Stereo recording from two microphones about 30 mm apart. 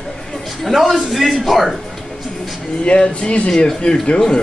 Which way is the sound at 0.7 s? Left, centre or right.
Centre.